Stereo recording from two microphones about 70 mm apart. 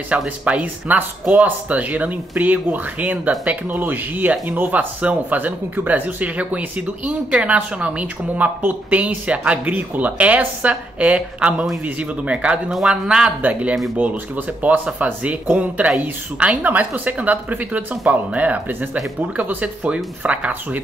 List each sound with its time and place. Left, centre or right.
0.1 s speech: centre